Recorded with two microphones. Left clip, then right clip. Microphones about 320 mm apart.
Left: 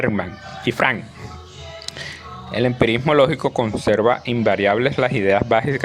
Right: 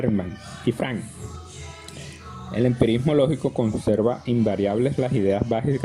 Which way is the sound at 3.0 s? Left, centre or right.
Left.